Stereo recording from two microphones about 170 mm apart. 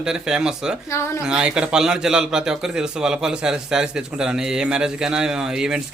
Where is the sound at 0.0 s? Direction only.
5° right (ahead or behind).